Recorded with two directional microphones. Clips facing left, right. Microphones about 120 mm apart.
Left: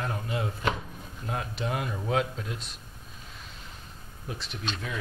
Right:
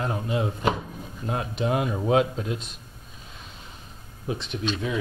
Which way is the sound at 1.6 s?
10° right (ahead or behind).